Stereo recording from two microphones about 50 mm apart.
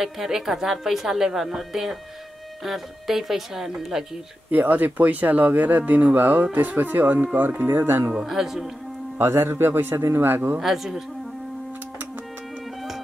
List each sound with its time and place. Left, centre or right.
0.0 s a woman's voice: centre
4.5 s a man's voice: right
8.3 s a woman's voice: centre
9.2 s a man's voice: right
10.6 s a woman's voice: centre